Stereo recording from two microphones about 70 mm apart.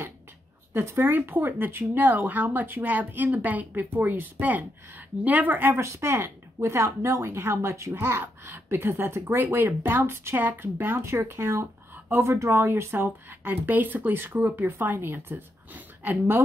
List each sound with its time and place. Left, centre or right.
0.7 s speech: right
5.8 s speech: right